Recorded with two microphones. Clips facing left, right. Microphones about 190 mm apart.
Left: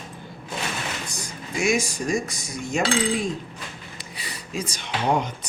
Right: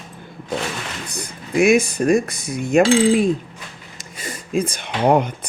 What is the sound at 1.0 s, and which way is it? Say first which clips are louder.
Speech: right 3 dB; 60° right (ahead or behind).